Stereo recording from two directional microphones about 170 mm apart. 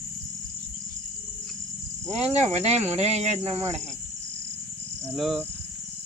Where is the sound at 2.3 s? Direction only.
40° right (ahead or behind).